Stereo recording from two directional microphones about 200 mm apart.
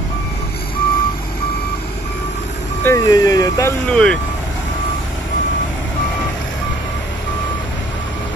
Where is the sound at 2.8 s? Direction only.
15° left (ahead or behind).